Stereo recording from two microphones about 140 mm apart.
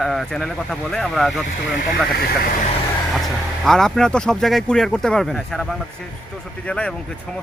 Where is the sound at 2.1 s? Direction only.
90° left.